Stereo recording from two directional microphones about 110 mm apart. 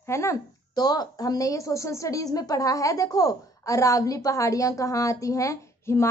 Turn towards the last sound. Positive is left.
turn(degrees=25)  # may be behind; listen again after turning